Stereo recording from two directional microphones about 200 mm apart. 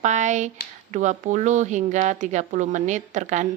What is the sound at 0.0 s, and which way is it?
Speech, 35° right (ahead or behind).